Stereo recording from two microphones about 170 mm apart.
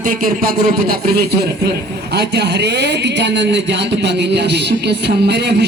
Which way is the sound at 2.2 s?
80° right.